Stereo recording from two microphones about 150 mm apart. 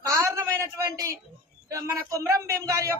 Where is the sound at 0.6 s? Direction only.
20° right (ahead or behind).